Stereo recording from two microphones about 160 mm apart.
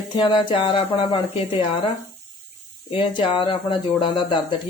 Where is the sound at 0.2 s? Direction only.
30° left (ahead or behind).